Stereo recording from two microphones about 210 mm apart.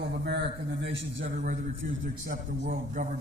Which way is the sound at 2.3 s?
40° right (ahead or behind).